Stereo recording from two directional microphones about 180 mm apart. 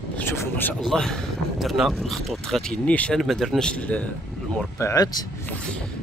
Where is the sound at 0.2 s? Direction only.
15° left (ahead or behind).